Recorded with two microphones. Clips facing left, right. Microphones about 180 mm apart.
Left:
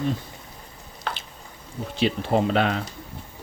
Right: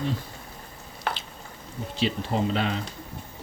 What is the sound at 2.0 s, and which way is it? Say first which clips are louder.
Speech: left 4 dB; 60° left (ahead or behind).